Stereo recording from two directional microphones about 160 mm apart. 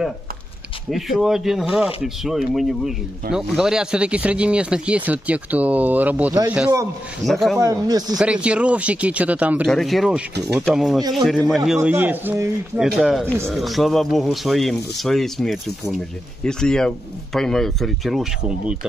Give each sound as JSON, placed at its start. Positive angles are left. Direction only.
{"t": 0.8, "sound": "speech", "side_deg": 0}
{"t": 7.2, "sound": "speech", "side_deg": 0}
{"t": 7.5, "sound": "speech", "side_deg": -20}
{"t": 8.2, "sound": "speech", "side_deg": -5}
{"t": 9.7, "sound": "speech", "side_deg": 0}
{"t": 11.0, "sound": "speech", "side_deg": -25}
{"t": 11.2, "sound": "speech", "side_deg": 0}